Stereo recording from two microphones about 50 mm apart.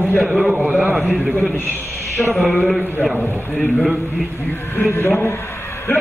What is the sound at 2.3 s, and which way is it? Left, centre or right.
A man's voice, centre.